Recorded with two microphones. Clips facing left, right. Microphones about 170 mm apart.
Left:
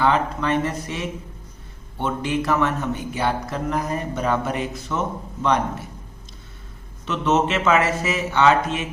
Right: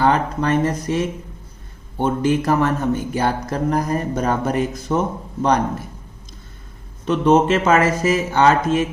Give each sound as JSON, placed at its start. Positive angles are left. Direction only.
{"t": 0.0, "sound": "speech", "side_deg": -40}
{"t": 7.0, "sound": "speech", "side_deg": -40}